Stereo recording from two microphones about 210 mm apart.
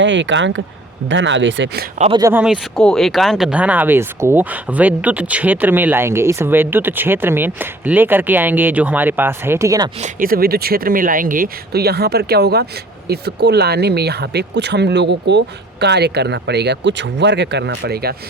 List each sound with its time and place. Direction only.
0.0 s speech: 60° right (ahead or behind)
2.0 s speech: 25° right (ahead or behind)
2.2 s speech: 5° right (ahead or behind)
10.0 s speech: 40° right (ahead or behind)